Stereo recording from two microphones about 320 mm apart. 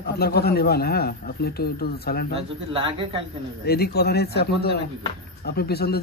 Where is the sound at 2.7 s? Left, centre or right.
Centre.